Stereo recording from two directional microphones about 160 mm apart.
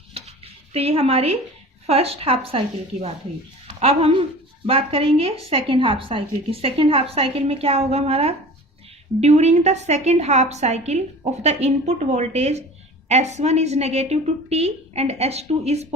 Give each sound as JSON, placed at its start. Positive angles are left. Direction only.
{"t": 0.1, "sound": "dishes", "side_deg": -40}
{"t": 1.9, "sound": "a woman's voice", "side_deg": -40}